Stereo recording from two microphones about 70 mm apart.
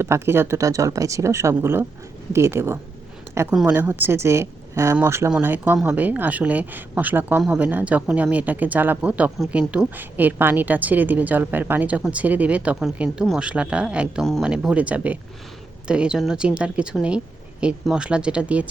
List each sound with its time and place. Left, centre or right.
0.0 s speech: right
3.7 s speech: right
5.7 s a woman's voice: centre
14.2 s speech: centre
14.4 s a woman's voice: centre
17.9 s speech: centre